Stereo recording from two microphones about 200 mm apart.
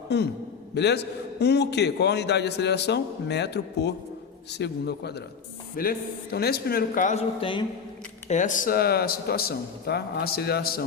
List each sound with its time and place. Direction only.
0.7 s a man's voice: 55° left (ahead or behind); by 7.6 s 30° left (ahead or behind)
8.3 s a man's voice: 40° left (ahead or behind)